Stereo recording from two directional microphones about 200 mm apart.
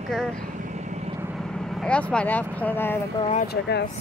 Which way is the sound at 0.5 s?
35° right (ahead or behind).